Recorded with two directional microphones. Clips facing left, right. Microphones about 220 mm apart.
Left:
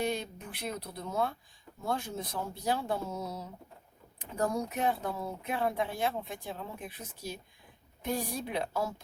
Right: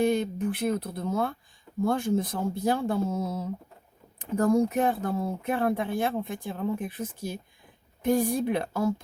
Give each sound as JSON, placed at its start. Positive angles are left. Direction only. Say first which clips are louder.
{"t": 0.0, "sound": "speech", "louder": "right 9 dB", "side_deg": -50}